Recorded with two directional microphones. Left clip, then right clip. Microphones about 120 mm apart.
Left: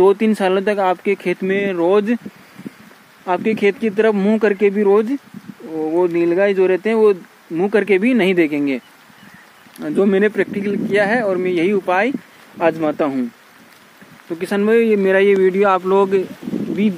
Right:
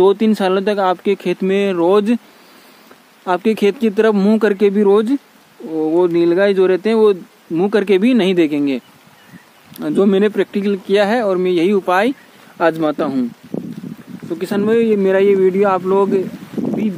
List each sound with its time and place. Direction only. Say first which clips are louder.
0.0 s speech: right 1 dB; 5° right (ahead or behind)
1.4 s speech: right 2 dB; 25° right (ahead or behind)
3.3 s speech: right 1 dB; 30° right (ahead or behind); by 8.8 s 15° right (ahead or behind)
9.8 s speech: right 1 dB; 20° right (ahead or behind)
14.4 s speech: even; 5° right (ahead or behind)